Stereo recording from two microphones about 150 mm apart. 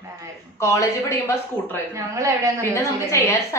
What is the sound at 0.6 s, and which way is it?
Speech, 20° left (ahead or behind).